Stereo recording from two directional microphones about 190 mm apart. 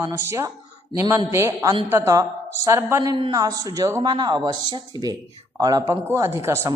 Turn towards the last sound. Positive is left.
turn(degrees=-15)  # may be behind; listen again after turning